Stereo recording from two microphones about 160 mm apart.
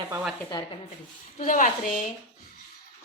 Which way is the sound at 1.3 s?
55° left (ahead or behind).